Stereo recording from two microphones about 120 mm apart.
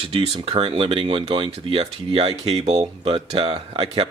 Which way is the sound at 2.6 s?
60° right (ahead or behind).